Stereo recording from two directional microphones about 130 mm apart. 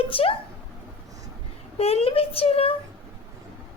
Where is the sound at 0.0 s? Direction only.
45° left (ahead or behind).